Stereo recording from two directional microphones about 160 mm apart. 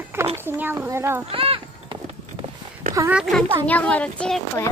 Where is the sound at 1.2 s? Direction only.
35° right (ahead or behind).